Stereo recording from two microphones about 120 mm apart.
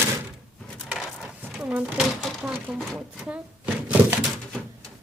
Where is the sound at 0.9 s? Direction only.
5° right (ahead or behind).